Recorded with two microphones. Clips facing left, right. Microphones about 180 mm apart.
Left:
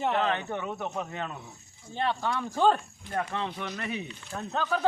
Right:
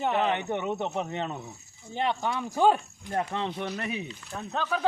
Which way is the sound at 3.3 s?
20° right (ahead or behind).